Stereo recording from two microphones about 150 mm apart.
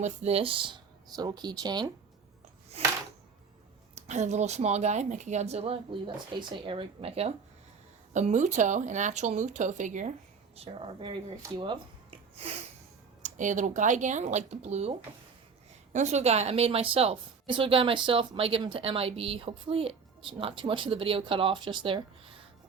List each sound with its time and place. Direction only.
0.0 s a woman's voice: 45° right (ahead or behind); by 1.9 s 30° right (ahead or behind)
2.8 s a sound: 45° right (ahead or behind)
3.9 s a woman's voice: 50° right (ahead or behind)
8.1 s speech: 55° right (ahead or behind)
10.5 s a woman's voice: 40° right (ahead or behind)
13.2 s a woman's voice: 55° right (ahead or behind); by 22.0 s 30° right (ahead or behind)